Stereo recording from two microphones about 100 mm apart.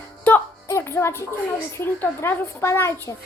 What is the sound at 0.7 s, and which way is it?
A woman's voice, 25° left (ahead or behind).